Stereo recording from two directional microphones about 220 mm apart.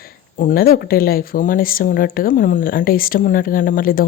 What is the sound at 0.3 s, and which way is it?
Speech, 40° left (ahead or behind).